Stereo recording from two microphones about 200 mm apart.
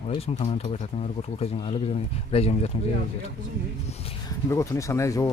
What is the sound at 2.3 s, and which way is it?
Speech, 30° left (ahead or behind).